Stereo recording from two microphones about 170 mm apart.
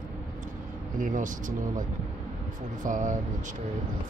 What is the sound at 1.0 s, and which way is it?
Speech, 50° right (ahead or behind).